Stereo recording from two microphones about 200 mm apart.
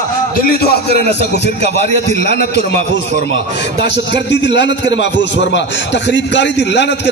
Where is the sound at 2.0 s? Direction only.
55° left (ahead or behind).